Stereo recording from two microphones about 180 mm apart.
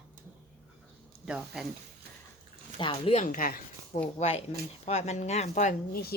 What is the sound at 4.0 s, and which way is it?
Speech, 35° left (ahead or behind).